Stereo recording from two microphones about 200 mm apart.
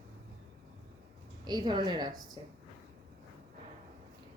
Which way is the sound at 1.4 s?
20° right (ahead or behind).